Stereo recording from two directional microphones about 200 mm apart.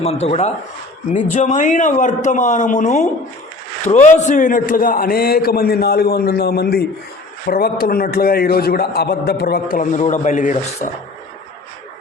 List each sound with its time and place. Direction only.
0.0 s a man's voice: 30° left (ahead or behind)